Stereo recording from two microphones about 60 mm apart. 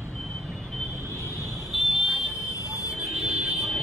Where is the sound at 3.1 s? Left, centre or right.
Centre.